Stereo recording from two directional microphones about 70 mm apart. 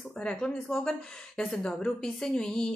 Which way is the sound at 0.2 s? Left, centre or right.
Centre.